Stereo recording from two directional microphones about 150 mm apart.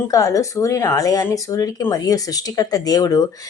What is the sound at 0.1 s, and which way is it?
Speech, 20° left (ahead or behind).